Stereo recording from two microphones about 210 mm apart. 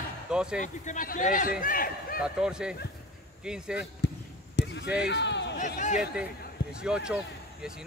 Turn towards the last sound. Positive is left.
turn(degrees=-5)  # may be behind; listen again after turning